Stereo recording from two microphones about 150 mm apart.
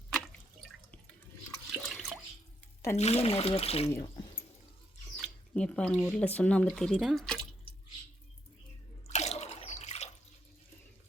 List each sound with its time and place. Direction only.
1.8 s water: centre (ahead or behind)
2.9 s speech: 45° left (ahead or behind)
5.1 s drip: 5° left (ahead or behind)
6.2 s speech: 10° left (ahead or behind)
9.0 s bathtub: 45° left (ahead or behind)